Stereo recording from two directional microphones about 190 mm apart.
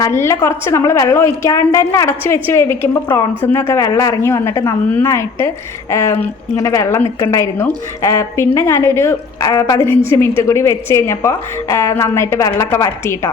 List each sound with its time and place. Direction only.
0.0 s a woman's voice: 15° left (ahead or behind)